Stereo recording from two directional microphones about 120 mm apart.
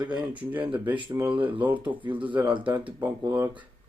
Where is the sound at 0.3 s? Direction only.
15° right (ahead or behind).